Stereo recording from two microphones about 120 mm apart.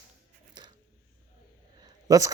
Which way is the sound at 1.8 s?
30° right (ahead or behind).